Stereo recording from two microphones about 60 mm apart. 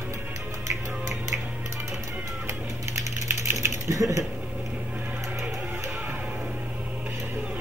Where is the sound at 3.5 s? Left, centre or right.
Right.